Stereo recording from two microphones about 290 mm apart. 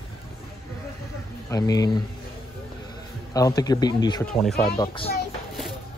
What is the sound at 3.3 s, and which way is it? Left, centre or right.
Speech, centre.